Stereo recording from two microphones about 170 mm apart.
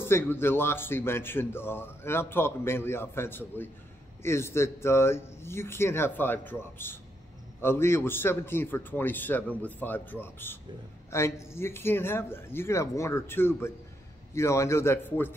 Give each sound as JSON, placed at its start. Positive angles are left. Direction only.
{"t": 0.0, "sound": "speech", "side_deg": 15}